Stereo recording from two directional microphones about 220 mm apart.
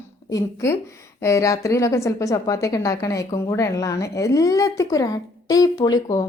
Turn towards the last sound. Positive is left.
turn(degrees=15)  # may be behind; listen again after turning